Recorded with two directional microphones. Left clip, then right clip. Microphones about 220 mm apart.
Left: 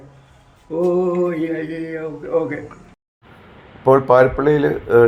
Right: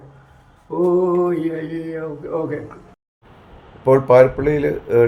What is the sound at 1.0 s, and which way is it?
Speech, 10° right (ahead or behind).